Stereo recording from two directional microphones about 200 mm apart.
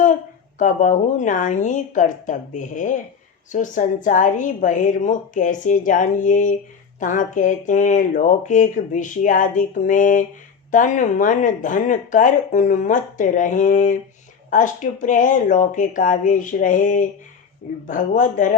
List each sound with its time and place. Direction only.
0.6 s speech: 40° left (ahead or behind)